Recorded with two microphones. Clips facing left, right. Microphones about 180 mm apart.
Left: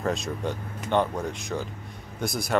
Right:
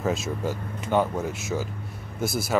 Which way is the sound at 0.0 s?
5° right (ahead or behind).